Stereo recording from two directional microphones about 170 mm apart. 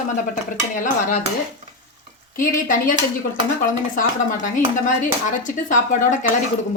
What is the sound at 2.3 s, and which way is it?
A woman's voice, 55° left (ahead or behind).